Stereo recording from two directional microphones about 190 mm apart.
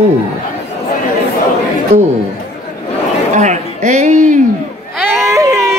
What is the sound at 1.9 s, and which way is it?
Speech, 35° right (ahead or behind).